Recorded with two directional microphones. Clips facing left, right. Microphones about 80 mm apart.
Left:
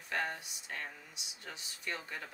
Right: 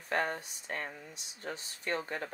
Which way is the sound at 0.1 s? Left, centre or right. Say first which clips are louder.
Right 4 dB; right.